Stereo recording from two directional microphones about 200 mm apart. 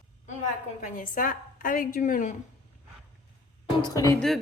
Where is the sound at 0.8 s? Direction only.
40° left (ahead or behind).